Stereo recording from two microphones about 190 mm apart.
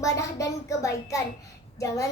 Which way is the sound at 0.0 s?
15° left (ahead or behind).